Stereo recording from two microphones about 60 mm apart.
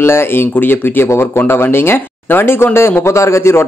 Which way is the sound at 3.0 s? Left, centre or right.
Left.